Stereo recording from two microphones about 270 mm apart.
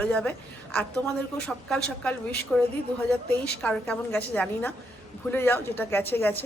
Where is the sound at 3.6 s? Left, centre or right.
Centre.